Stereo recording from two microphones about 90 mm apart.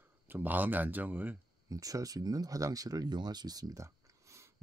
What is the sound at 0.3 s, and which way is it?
Speech, 20° right (ahead or behind).